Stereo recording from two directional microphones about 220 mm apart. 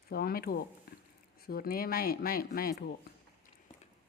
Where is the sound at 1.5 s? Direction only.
45° left (ahead or behind).